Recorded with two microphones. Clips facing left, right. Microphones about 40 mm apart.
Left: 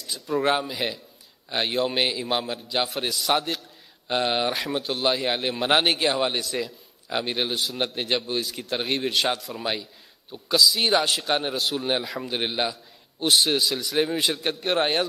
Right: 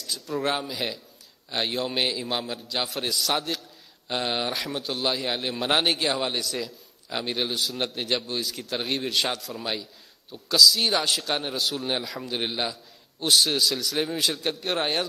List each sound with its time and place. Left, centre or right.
0.0 s a man's voice: centre